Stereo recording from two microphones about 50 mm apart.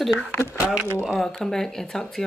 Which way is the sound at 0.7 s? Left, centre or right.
Centre.